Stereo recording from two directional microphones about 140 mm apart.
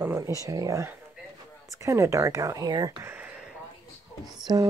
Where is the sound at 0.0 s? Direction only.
20° right (ahead or behind).